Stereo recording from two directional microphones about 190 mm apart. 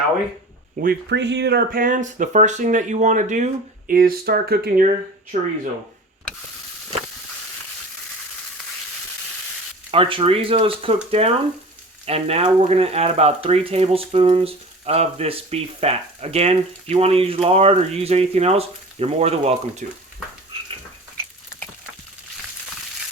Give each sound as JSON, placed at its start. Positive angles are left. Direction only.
{"t": 0.8, "sound": "speech", "side_deg": -60}
{"t": 5.3, "sound": "speech", "side_deg": -40}
{"t": 9.9, "sound": "speech", "side_deg": -30}